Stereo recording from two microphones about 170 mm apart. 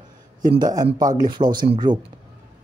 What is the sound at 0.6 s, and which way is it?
Speech, 20° right (ahead or behind).